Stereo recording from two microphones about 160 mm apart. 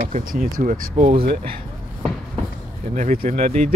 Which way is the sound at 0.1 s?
60° right (ahead or behind).